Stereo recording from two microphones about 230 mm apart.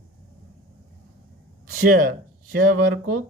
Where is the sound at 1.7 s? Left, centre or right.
Right.